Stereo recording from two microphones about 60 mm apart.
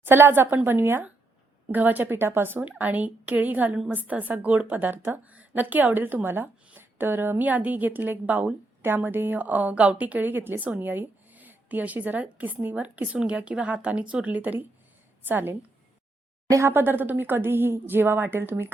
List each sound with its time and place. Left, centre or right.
0.0 s a woman's voice: right
16.6 s a woman's voice: right